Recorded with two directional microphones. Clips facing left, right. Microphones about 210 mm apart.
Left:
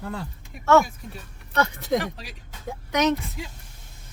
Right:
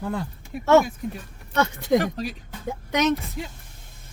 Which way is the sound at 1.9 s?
40° right (ahead or behind).